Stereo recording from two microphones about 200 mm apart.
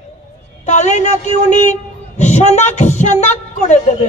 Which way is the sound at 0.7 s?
35° left (ahead or behind).